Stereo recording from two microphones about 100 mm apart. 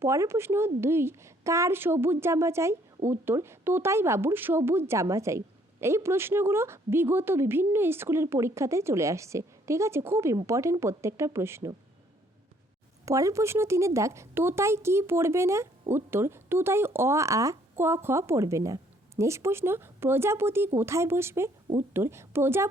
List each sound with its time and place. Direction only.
0.0 s a woman's voice: 30° right (ahead or behind)
13.1 s a woman's voice: 30° right (ahead or behind)